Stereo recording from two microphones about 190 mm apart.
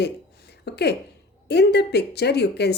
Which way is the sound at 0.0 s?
60° left (ahead or behind).